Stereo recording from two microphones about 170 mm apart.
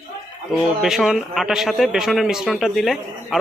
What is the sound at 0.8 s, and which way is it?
A man's voice, centre (ahead or behind).